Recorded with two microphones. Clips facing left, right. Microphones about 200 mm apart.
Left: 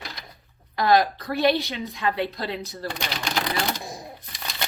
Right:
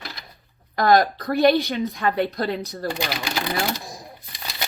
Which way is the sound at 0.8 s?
50° right (ahead or behind).